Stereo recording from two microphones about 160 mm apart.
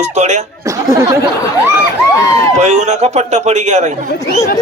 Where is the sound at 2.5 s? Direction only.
45° right (ahead or behind).